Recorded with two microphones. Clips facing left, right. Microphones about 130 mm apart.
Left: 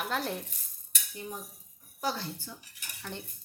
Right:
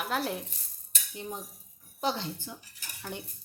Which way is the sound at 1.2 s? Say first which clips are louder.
Right 2 dB; 25° right (ahead or behind).